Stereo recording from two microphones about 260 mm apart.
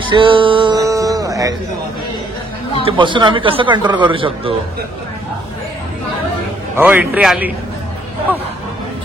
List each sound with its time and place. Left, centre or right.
0.1 s music: centre
2.8 s a man's voice: centre
6.8 s speech: centre